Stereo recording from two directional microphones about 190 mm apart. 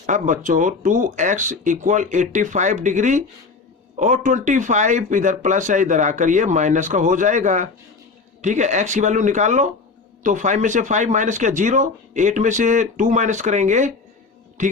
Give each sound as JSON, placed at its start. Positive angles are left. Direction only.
{"t": 0.0, "sound": "speech", "side_deg": -40}